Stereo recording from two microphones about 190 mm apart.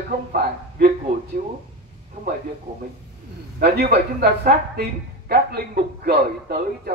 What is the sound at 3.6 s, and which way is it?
Speech, 60° right (ahead or behind).